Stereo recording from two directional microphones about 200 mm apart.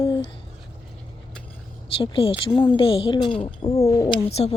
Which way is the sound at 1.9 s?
25° left (ahead or behind).